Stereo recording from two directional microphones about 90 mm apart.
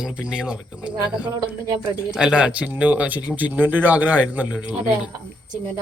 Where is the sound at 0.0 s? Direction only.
10° right (ahead or behind).